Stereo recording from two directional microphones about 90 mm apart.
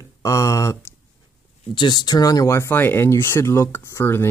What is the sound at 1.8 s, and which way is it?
Speech, 55° left (ahead or behind).